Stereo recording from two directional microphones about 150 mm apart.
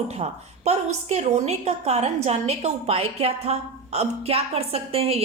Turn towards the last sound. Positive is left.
turn(degrees=-40)  # may be behind; listen again after turning